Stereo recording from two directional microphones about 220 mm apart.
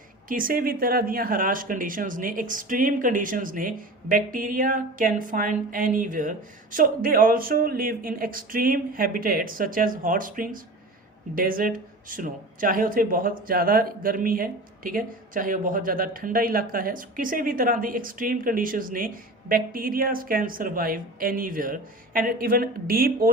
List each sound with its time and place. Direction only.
0.3 s speech: 40° right (ahead or behind)